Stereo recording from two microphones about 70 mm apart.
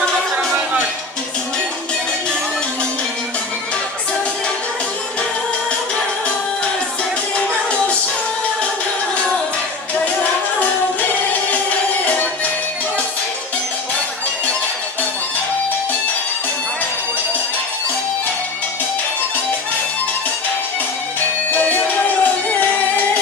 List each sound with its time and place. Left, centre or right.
11.5 s music: left
21.5 s music: left